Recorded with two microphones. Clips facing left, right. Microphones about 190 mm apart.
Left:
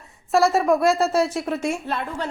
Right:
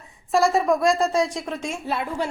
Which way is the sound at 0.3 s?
Centre (ahead or behind).